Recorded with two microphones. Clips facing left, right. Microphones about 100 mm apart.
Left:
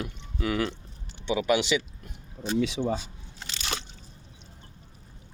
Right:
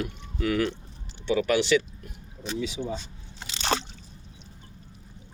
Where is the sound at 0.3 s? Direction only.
15° left (ahead or behind).